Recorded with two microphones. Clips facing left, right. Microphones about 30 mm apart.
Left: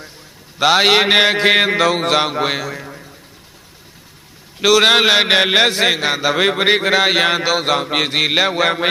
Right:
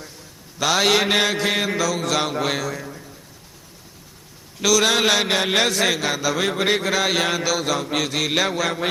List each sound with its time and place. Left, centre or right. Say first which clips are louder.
0.6 s a man's voice: left 6 dB; left
2.3 s a man's voice: left 4 dB; left
4.6 s a man's voice: left 6 dB; left
5.0 s a sound: left 6 dB; left
5.5 s a man's voice: left 5 dB; left